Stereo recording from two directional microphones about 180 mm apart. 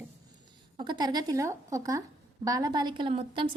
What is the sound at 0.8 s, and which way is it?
Speech, 25° right (ahead or behind).